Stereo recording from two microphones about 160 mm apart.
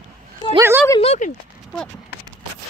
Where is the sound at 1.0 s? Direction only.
40° left (ahead or behind).